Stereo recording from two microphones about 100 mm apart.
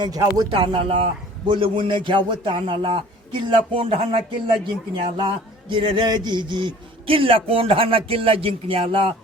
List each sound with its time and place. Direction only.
0.0 s speech: 40° right (ahead or behind)
0.5 s a man's voice: 55° right (ahead or behind)
7.1 s a man's voice: 65° right (ahead or behind)